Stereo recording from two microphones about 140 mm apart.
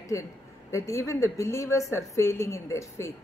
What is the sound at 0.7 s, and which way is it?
A woman's voice, 20° left (ahead or behind).